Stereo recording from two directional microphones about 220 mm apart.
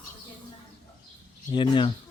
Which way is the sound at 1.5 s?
20° left (ahead or behind).